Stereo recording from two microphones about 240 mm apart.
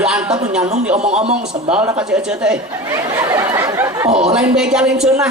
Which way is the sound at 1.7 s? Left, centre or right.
Centre.